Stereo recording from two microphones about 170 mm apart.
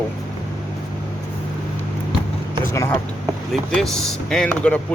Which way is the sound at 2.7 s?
15° left (ahead or behind).